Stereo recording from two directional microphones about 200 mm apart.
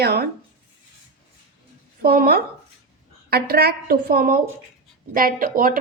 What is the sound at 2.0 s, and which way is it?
Speech, 50° right (ahead or behind).